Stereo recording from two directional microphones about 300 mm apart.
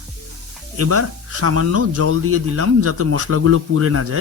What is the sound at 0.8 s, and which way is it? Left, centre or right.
Speech, right.